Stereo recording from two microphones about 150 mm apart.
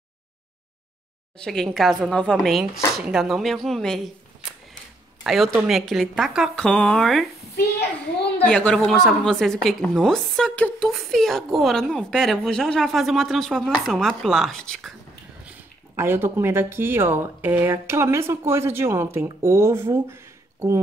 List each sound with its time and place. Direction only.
1.4 s a woman's voice: 5° left (ahead or behind)
8.5 s a woman's voice: 5° left (ahead or behind)
16.0 s speech: 15° right (ahead or behind)